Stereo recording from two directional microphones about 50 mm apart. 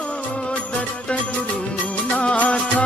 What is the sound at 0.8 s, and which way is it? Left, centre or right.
Music, left.